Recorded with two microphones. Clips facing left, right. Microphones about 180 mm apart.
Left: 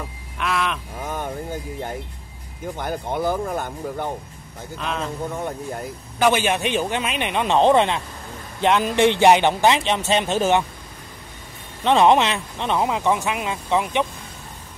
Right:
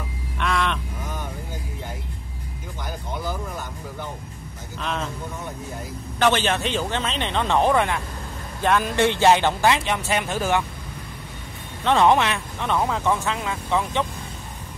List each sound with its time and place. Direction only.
0.4 s crow: 5° left (ahead or behind)
1.0 s a sound: 50° left (ahead or behind)
2.8 s speech: 55° left (ahead or behind)
4.7 s speech: centre (ahead or behind)
6.1 s speech: 10° left (ahead or behind)
11.8 s speech: 20° left (ahead or behind)